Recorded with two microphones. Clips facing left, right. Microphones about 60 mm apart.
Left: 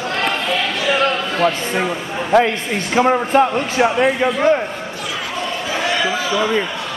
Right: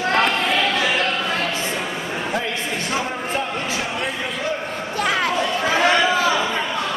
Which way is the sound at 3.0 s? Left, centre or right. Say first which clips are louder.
Left 11 dB; left.